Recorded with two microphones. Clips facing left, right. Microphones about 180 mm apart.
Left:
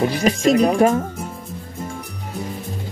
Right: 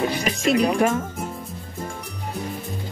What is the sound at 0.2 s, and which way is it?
Speech, 40° left (ahead or behind).